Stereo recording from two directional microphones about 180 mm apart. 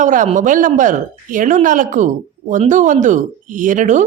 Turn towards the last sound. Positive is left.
turn(degrees=-45)  # may be behind; listen again after turning